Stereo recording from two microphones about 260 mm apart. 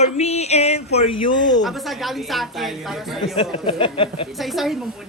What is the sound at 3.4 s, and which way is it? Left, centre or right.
Speech, centre.